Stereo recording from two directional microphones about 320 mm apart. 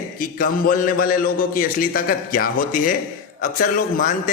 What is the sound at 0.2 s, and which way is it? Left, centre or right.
A man's voice, left.